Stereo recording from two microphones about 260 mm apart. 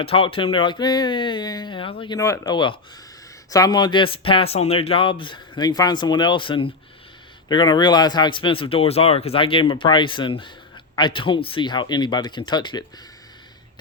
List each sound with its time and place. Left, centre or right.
0.0 s speech: left